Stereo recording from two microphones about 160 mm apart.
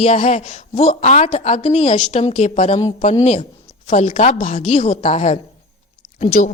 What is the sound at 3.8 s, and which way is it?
A woman's voice, 45° left (ahead or behind).